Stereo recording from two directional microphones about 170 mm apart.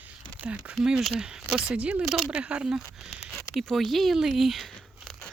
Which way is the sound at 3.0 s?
Centre (ahead or behind).